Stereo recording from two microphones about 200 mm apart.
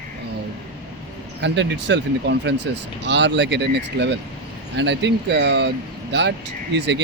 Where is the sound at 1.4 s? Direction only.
60° right (ahead or behind).